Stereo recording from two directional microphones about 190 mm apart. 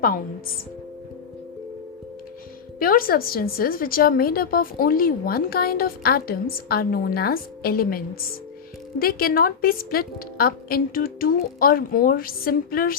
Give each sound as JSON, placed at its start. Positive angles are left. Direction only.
{"t": 2.7, "sound": "a woman's voice", "side_deg": 50}